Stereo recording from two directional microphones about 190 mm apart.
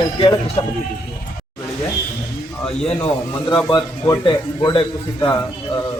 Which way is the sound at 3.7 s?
20° left (ahead or behind).